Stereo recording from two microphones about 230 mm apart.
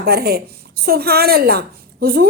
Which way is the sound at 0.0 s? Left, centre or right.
Right.